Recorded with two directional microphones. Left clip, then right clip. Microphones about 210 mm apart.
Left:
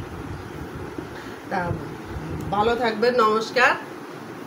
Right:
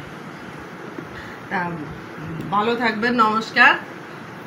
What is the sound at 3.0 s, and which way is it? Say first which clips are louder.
Speech: left 1 dB; 30° left (ahead or behind).